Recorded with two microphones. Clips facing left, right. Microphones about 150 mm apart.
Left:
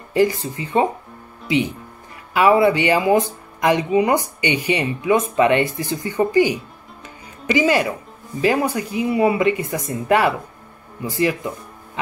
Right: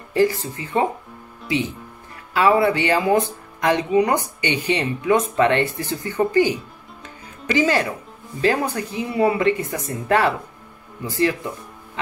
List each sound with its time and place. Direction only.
0.1 s speech: 15° left (ahead or behind)
2.3 s speech: 15° left (ahead or behind)